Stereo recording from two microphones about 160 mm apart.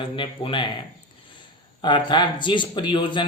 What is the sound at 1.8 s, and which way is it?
Speech, 30° left (ahead or behind).